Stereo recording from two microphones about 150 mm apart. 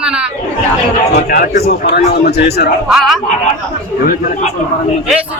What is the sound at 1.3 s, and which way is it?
A man's voice, 85° left.